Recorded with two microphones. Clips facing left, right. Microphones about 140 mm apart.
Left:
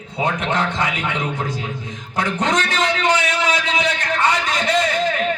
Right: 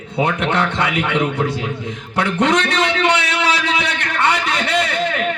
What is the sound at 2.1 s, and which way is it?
A man's voice, 65° right (ahead or behind).